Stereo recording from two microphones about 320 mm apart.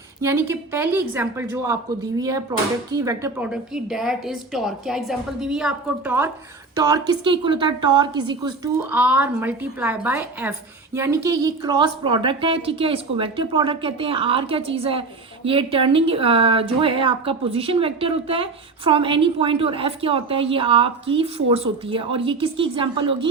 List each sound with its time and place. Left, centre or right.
0.2 s a woman's voice: centre